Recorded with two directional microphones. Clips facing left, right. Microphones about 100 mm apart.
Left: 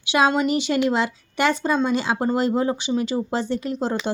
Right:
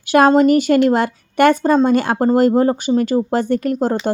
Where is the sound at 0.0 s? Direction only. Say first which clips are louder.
Right 8 dB; 50° right (ahead or behind).